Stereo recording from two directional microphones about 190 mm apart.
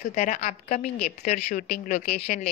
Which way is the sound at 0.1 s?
40° left (ahead or behind).